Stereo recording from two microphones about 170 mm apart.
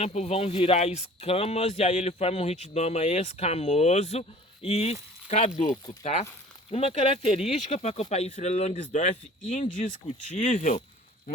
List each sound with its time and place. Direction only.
0.0 s speech: 40° left (ahead or behind)